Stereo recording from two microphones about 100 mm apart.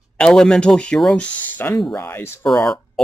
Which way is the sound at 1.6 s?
20° left (ahead or behind).